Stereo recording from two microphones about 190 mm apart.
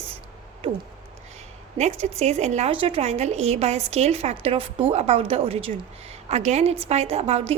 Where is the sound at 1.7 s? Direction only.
35° right (ahead or behind).